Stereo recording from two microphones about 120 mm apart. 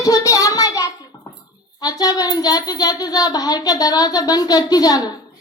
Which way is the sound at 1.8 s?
30° left (ahead or behind).